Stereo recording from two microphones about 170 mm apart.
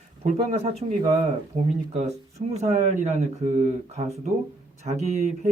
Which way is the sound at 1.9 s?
40° right (ahead or behind).